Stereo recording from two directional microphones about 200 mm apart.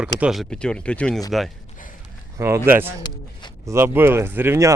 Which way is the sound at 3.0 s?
20° left (ahead or behind).